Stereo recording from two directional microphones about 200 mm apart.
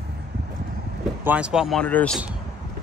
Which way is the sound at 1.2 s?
5° right (ahead or behind).